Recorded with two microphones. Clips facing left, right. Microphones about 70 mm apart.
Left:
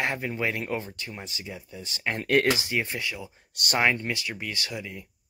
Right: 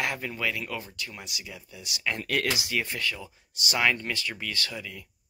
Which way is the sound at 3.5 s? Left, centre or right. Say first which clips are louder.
Left 2 dB; left.